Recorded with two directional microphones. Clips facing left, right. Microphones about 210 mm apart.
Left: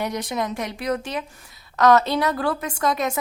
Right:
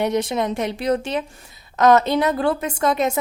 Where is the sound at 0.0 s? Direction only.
25° right (ahead or behind).